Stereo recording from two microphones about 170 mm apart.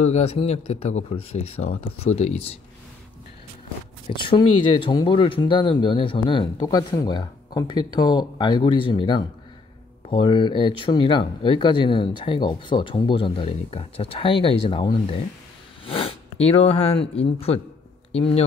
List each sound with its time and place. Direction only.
0.0 s speech: 40° left (ahead or behind)
4.2 s speech: 30° left (ahead or behind)